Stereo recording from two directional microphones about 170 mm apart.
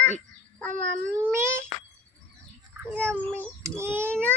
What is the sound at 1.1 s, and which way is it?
Speech, 15° right (ahead or behind).